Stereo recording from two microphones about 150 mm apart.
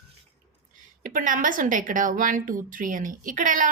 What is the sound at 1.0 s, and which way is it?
A woman's voice, 65° right (ahead or behind).